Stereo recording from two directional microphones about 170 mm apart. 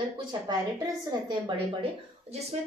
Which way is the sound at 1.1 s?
30° right (ahead or behind).